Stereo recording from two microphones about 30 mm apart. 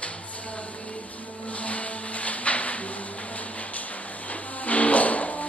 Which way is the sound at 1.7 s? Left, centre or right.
Left.